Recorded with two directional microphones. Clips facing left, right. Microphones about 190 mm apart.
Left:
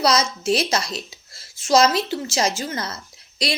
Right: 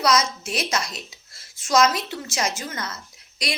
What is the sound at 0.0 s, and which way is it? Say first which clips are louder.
A woman's voice: left 2 dB; 30° left (ahead or behind).